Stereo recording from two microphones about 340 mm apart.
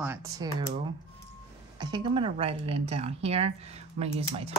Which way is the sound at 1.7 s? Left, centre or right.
Centre.